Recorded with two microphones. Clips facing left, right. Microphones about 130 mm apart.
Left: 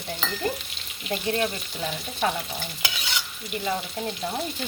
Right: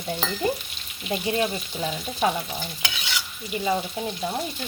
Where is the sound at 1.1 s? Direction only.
15° right (ahead or behind).